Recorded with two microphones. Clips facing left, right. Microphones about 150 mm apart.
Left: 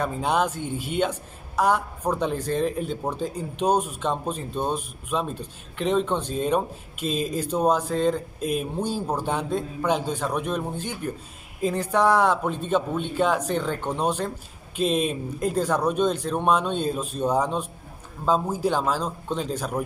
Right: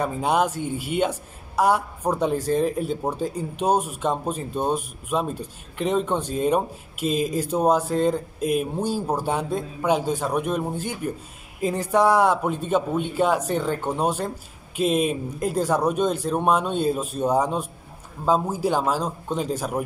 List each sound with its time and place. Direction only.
0.0 s speech: 10° right (ahead or behind)